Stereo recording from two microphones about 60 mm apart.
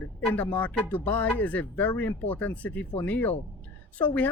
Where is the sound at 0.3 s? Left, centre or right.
Left.